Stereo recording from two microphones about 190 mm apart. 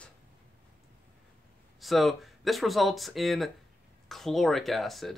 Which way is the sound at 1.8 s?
Centre (ahead or behind).